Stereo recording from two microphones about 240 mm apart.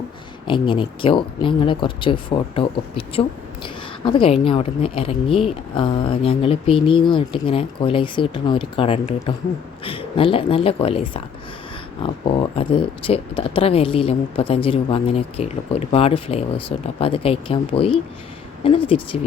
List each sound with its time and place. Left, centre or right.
0.4 s speech: centre
12.5 s speech: left